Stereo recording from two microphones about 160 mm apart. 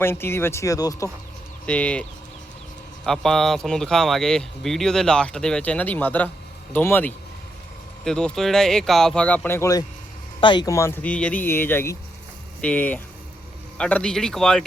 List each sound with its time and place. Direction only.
0.0 s speech: 15° left (ahead or behind)
1.6 s speech: 10° left (ahead or behind)
3.1 s speech: centre (ahead or behind)